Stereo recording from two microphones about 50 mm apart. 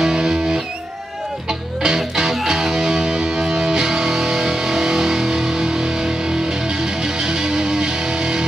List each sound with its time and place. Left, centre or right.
0.0 s music: centre